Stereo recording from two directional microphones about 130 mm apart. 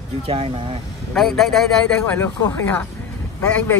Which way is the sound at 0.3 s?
45° right (ahead or behind).